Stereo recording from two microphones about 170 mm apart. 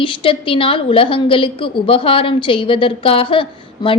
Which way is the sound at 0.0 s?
30° left (ahead or behind).